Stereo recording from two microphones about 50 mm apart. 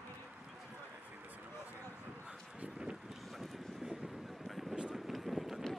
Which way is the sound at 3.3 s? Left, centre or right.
Centre.